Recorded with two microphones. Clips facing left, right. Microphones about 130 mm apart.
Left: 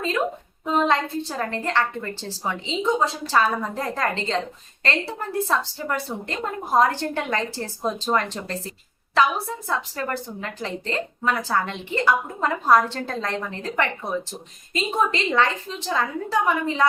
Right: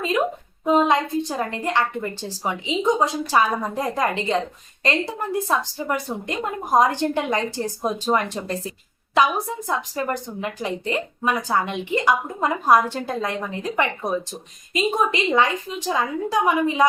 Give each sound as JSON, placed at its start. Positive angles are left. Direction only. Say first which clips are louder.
{"t": 0.6, "sound": "a woman's voice", "louder": "right 3 dB", "side_deg": -20}